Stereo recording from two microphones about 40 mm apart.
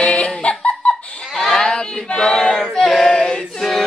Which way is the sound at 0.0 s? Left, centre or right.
Left.